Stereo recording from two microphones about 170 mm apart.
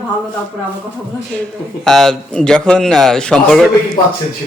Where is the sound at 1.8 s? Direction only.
Centre (ahead or behind).